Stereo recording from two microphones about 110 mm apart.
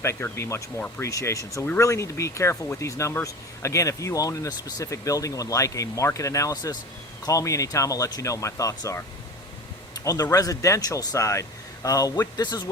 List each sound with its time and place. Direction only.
0.0 s speech: 25° left (ahead or behind)
9.9 s a sound: 35° left (ahead or behind)
10.3 s speech: 30° left (ahead or behind)